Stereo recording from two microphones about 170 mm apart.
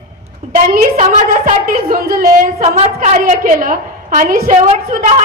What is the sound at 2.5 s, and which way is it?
Speech, 40° right (ahead or behind).